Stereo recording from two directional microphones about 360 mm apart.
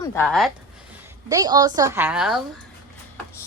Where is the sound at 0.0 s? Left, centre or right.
Centre.